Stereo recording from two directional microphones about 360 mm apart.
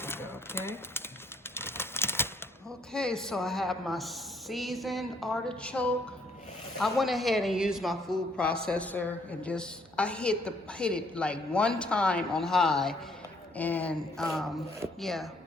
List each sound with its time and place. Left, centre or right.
0.0 s a sound: centre
1.5 s typewriter: centre
2.9 s speech: centre